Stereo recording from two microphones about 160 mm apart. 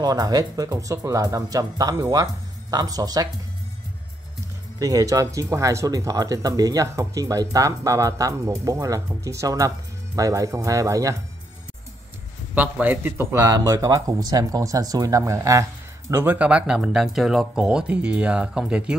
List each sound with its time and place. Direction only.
0.0 s speech: 25° right (ahead or behind)
4.7 s speech: 20° right (ahead or behind)
12.5 s speech: 10° right (ahead or behind)